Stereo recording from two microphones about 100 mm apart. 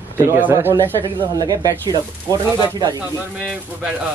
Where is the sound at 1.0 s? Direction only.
55° right (ahead or behind).